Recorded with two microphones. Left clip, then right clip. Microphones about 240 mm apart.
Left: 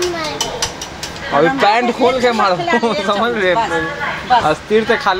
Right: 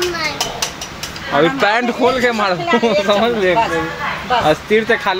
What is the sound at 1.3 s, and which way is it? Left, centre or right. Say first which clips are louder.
Speech: left 2 dB; centre.